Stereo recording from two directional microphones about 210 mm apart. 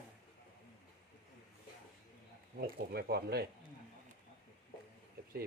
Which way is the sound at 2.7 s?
50° right (ahead or behind).